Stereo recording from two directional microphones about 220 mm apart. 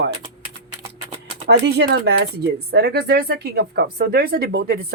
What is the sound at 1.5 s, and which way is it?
Speech, 50° right (ahead or behind).